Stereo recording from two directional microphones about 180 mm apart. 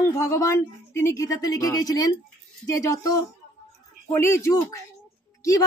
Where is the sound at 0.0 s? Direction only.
15° left (ahead or behind).